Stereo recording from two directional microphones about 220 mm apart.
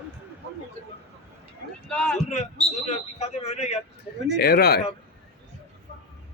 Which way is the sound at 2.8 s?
30° left (ahead or behind).